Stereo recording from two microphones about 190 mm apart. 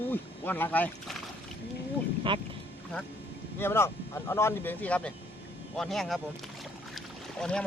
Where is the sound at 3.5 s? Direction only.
10° left (ahead or behind).